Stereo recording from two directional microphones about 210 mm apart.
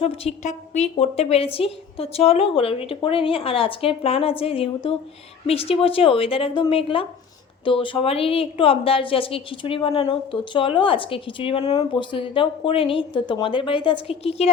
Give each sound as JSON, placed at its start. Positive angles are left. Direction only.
{"t": 0.0, "sound": "a woman's voice", "side_deg": 30}